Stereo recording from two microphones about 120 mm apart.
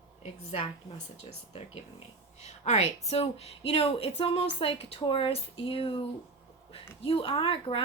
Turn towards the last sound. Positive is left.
turn(degrees=50)  # may be behind; listen again after turning